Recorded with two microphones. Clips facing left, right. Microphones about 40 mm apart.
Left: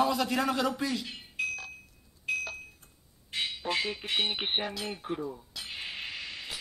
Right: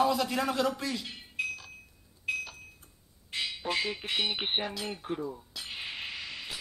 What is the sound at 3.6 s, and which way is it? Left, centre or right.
Squawk, centre.